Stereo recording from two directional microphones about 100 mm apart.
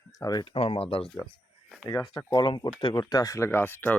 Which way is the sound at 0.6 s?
75° left (ahead or behind).